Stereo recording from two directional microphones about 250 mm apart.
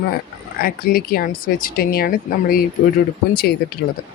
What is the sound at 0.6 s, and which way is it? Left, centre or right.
Speech, left.